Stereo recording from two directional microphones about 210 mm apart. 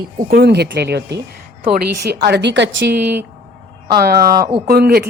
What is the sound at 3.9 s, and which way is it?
A woman's voice, 45° right (ahead or behind).